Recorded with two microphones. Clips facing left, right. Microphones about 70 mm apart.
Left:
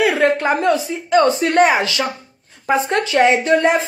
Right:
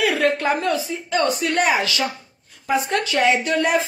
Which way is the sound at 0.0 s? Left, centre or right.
Left.